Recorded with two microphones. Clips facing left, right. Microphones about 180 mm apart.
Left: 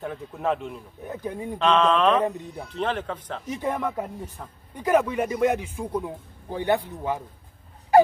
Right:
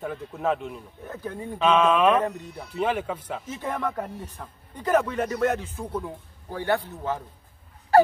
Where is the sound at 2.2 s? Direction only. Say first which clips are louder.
Left 2 dB; 15° left (ahead or behind).